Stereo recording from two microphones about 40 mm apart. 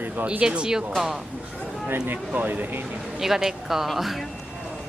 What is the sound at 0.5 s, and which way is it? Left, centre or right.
Speech, centre.